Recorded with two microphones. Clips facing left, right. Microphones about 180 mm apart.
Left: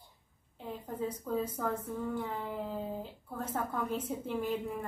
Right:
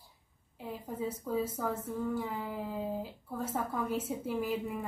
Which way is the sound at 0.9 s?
5° right (ahead or behind).